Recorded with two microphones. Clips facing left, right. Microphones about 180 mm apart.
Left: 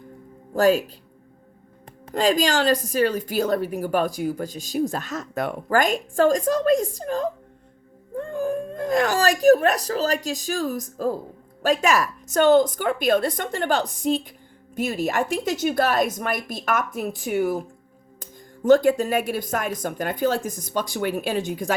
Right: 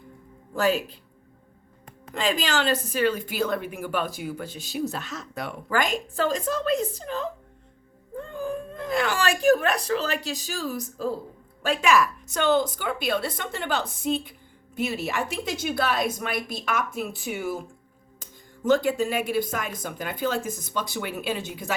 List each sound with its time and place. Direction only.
0.5 s a woman's voice: 45° left (ahead or behind)
2.1 s a woman's voice: 40° left (ahead or behind)